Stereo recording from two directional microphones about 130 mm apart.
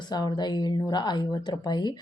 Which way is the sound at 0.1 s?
35° left (ahead or behind).